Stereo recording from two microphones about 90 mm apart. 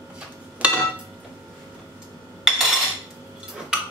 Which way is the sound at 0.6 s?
15° right (ahead or behind).